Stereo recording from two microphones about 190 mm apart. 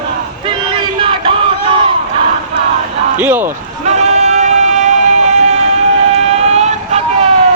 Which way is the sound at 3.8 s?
35° right (ahead or behind).